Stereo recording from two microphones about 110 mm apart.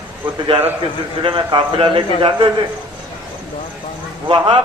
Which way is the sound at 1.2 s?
45° right (ahead or behind).